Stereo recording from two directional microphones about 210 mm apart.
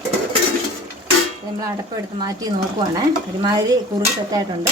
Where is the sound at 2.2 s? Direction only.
15° right (ahead or behind).